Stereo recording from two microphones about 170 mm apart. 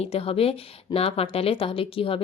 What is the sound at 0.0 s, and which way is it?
A woman's voice, 35° left (ahead or behind).